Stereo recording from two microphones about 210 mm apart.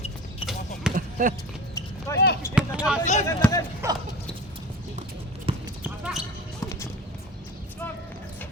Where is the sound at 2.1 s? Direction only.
15° left (ahead or behind).